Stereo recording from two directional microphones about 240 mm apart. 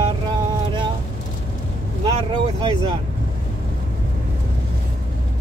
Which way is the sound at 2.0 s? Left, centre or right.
Centre.